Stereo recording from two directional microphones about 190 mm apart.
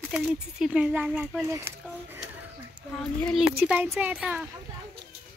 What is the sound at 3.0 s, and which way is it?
Speech, centre (ahead or behind).